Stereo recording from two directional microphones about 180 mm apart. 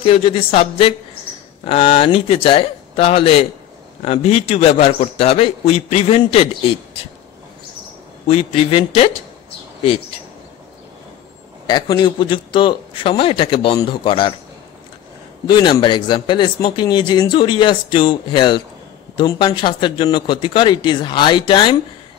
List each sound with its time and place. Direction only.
0.0 s a man's voice: 30° left (ahead or behind)
8.3 s a man's voice: 35° left (ahead or behind)
11.6 s speech: 25° left (ahead or behind)
15.4 s speech: 25° left (ahead or behind)